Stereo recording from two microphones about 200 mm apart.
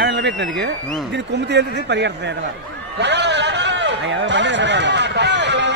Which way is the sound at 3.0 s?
60° right (ahead or behind).